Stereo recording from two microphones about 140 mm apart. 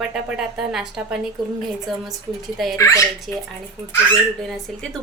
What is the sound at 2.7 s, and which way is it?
Speech, 20° left (ahead or behind).